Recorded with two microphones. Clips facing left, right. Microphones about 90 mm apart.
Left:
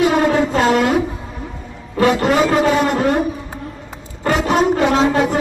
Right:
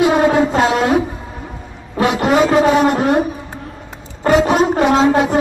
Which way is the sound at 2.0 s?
20° right (ahead or behind).